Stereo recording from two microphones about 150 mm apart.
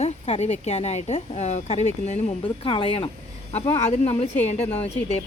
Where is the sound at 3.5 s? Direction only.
45° left (ahead or behind).